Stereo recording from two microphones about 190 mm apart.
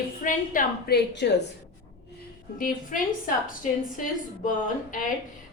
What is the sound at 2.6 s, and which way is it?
Speech, 45° left (ahead or behind).